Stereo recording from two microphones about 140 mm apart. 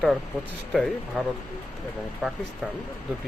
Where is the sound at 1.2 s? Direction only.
Centre (ahead or behind).